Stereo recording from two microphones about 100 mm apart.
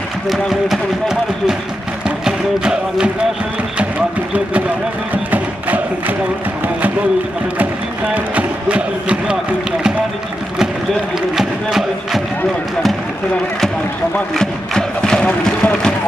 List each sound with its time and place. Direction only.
0.3 s speech: 5° right (ahead or behind)
5.1 s music: 15° right (ahead or behind)
8.1 s a sound: 15° right (ahead or behind)
11.3 s speech: 5° right (ahead or behind)
14.3 s speech: 5° left (ahead or behind)